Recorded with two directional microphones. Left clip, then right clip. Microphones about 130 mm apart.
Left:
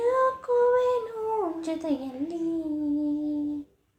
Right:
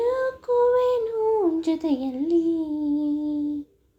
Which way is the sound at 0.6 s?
15° right (ahead or behind).